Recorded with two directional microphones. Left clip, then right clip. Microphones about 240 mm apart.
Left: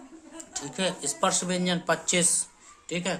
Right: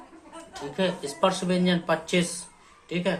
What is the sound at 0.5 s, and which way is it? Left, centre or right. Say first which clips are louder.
Speech: right 2 dB; left.